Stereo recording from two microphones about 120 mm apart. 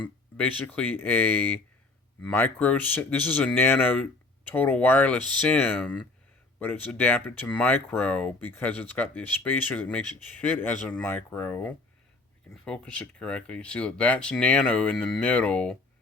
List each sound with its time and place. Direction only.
0.3 s speech: 15° left (ahead or behind)